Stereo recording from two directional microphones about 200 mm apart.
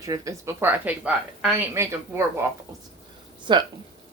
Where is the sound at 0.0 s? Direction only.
15° right (ahead or behind).